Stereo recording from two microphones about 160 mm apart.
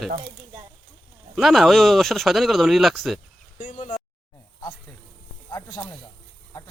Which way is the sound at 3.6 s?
45° left (ahead or behind).